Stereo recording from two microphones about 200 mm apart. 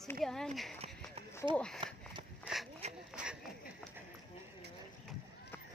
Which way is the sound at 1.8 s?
25° right (ahead or behind).